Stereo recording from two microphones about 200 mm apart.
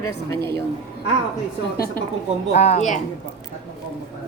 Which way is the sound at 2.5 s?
30° left (ahead or behind).